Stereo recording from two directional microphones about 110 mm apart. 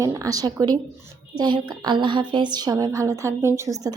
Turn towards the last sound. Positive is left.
turn(degrees=-30)  # may be behind; listen again after turning